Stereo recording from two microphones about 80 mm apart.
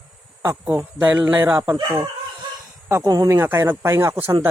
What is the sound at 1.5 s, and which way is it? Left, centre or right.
Speech, right.